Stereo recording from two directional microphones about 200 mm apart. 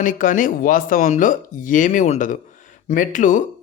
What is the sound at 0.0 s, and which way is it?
A man's voice, 40° left (ahead or behind).